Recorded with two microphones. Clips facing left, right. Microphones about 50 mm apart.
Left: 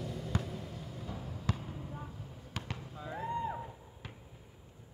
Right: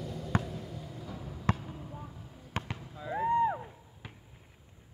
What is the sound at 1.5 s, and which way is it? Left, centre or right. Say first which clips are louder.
Basketball bounce: right 6 dB; right.